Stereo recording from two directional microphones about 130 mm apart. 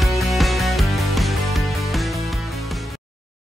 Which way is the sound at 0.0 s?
Centre (ahead or behind).